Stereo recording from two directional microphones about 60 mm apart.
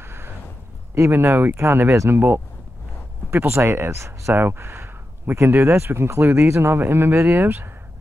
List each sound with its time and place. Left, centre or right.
0.0 s a sound: right
1.1 s speech: right
3.5 s speech: right
4.3 s speech: right